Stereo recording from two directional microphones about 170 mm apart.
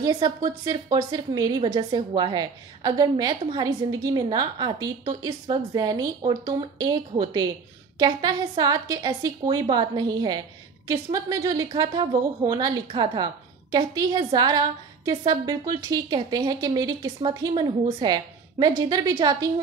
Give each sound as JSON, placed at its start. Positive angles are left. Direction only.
{"t": 0.0, "sound": "a woman's voice", "side_deg": -25}